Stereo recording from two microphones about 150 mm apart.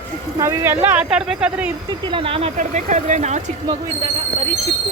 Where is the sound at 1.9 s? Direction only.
35° right (ahead or behind).